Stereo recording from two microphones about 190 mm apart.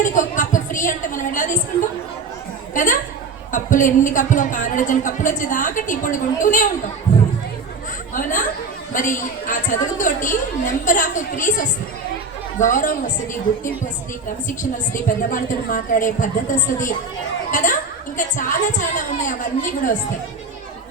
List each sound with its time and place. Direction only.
0.0 s a woman's voice: 40° left (ahead or behind)
2.7 s speech: 40° left (ahead or behind)
7.1 s a sound: 40° left (ahead or behind)
8.1 s speech: 45° left (ahead or behind)
14.4 s a child's voice: 45° left (ahead or behind)